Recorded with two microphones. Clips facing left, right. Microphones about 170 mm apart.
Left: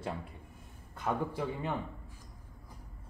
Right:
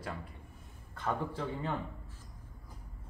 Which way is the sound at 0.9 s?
10° left (ahead or behind).